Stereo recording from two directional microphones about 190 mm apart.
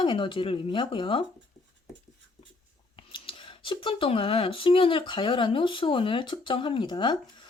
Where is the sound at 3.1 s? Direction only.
25° left (ahead or behind).